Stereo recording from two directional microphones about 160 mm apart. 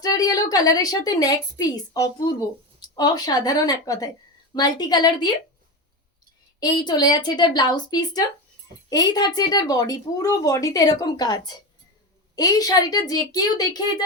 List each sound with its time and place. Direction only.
0.0 s a woman's voice: 25° left (ahead or behind)
6.6 s a woman's voice: 25° left (ahead or behind)